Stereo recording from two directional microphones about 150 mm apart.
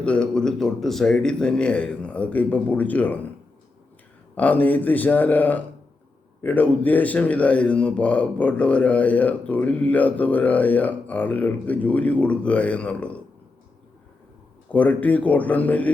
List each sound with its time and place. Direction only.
0.0 s speech: 5° left (ahead or behind)
4.4 s speech: 10° left (ahead or behind)
14.7 s speech: 10° left (ahead or behind)